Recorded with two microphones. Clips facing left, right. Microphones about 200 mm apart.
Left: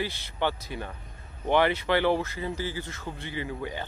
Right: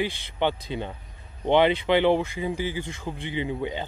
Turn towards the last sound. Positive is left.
turn(degrees=-20)  # may be behind; listen again after turning